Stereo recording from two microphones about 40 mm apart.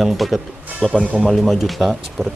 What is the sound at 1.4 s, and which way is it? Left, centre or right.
Speech, centre.